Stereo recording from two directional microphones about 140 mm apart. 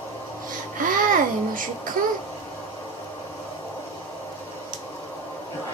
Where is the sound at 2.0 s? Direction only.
85° right.